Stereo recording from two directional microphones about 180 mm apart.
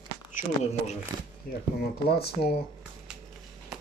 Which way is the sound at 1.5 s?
55° left (ahead or behind).